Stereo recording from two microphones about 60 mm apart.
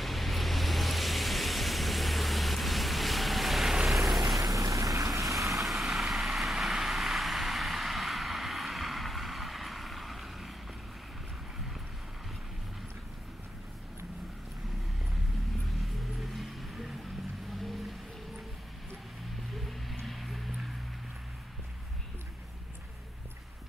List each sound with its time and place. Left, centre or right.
0.0 s vehicle: centre
4.4 s vehicle: right
5.5 s vehicle: centre
15.7 s music: centre
20.1 s vehicle: centre